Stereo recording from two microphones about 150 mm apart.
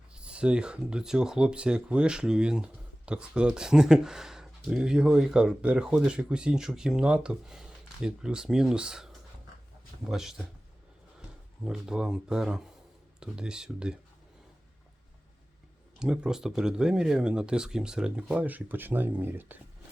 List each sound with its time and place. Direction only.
0.1 s speech: 5° right (ahead or behind)
10.1 s speech: centre (ahead or behind)
11.6 s speech: 5° right (ahead or behind)
16.0 s speech: 5° right (ahead or behind)